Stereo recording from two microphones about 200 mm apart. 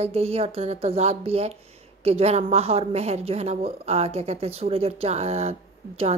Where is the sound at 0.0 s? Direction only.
30° right (ahead or behind).